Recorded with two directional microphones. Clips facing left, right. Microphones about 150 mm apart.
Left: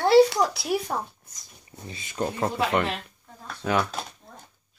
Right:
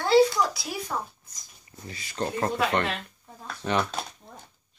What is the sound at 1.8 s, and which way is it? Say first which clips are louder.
Speech: left 1 dB; 20° left (ahead or behind).